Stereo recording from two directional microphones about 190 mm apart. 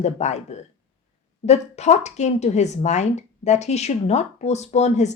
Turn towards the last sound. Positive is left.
turn(degrees=35)  # may be behind; listen again after turning